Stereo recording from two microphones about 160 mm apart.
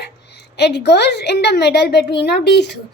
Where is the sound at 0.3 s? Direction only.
90° left.